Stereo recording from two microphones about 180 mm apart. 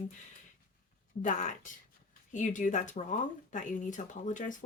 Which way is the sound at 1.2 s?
45° left (ahead or behind).